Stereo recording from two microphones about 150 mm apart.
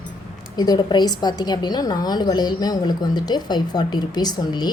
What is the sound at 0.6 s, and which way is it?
Speech, 30° left (ahead or behind).